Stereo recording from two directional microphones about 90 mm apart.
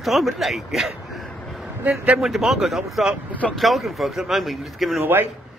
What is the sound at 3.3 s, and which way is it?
Speech, 15° left (ahead or behind).